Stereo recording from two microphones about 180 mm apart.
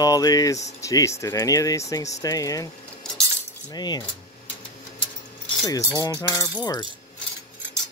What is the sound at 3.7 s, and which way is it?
Speech, 25° left (ahead or behind).